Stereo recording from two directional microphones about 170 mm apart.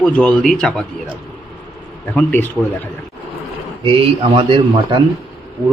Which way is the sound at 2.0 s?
10° left (ahead or behind).